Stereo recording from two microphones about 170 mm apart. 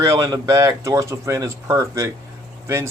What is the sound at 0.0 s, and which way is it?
Speech, 20° right (ahead or behind).